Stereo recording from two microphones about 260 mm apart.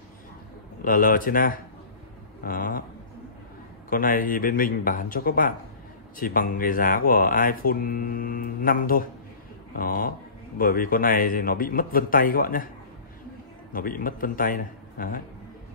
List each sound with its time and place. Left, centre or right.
0.8 s speech: left
2.4 s a sound: left
3.9 s speech: left
13.7 s speech: left